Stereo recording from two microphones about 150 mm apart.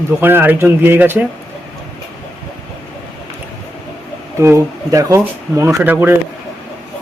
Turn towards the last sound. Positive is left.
turn(degrees=-10)  # may be behind; listen again after turning